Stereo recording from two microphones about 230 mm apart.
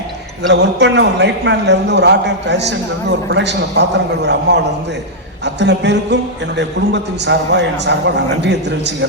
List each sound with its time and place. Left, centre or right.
0.4 s a man's voice: right